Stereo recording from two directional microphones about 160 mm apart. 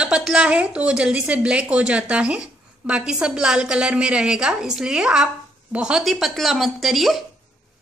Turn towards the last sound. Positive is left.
turn(degrees=0)  # may be behind; listen again after turning